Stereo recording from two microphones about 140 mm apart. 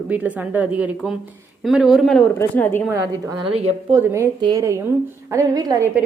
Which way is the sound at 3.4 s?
45° right (ahead or behind).